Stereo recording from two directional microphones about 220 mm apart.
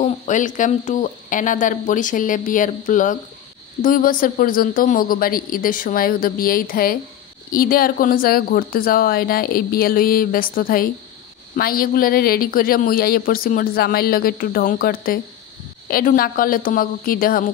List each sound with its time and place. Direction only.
0.0 s speech: 35° left (ahead or behind)